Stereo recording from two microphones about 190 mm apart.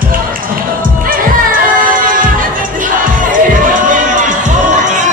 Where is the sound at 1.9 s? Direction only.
45° right (ahead or behind).